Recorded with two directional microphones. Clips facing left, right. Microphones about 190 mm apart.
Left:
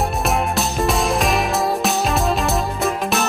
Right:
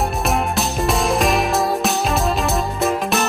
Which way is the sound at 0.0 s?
Centre (ahead or behind).